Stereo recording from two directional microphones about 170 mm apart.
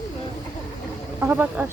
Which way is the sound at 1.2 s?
10° right (ahead or behind).